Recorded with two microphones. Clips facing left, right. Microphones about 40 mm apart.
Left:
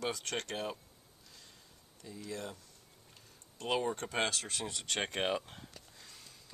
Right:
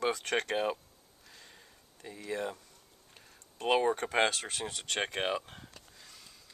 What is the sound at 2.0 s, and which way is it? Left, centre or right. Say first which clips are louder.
Speech: right 4 dB; right.